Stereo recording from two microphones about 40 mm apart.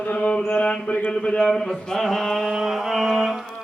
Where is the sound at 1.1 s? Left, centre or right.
Left.